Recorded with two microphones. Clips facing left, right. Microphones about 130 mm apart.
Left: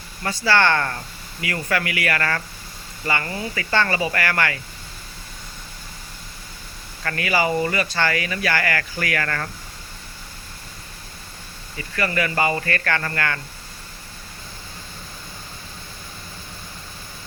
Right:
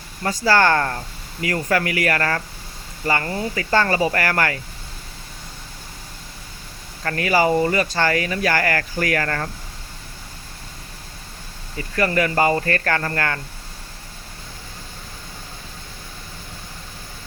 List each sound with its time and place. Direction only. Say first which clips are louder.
0.2 s speech: right 2 dB; 40° right (ahead or behind)
7.0 s speech: right 3 dB; 35° right (ahead or behind)
11.8 s speech: right 4 dB; 40° right (ahead or behind)